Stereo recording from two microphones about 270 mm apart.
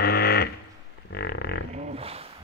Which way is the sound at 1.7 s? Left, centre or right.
Right.